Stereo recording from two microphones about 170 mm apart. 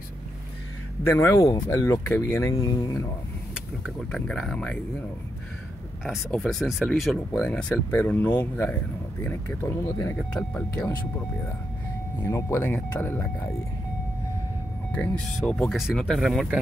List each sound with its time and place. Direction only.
1.0 s speech: 15° left (ahead or behind)
3.8 s speech: 5° left (ahead or behind)
6.0 s speech: 5° left (ahead or behind)
14.9 s speech: 5° left (ahead or behind)